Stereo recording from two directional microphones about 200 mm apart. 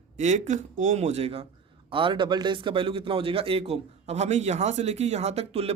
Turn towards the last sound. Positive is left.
turn(degrees=-30)  # may be behind; listen again after turning